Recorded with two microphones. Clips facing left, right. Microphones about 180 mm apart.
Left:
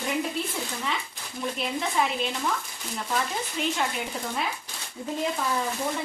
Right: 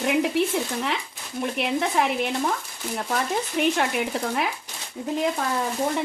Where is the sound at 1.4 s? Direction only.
65° right (ahead or behind).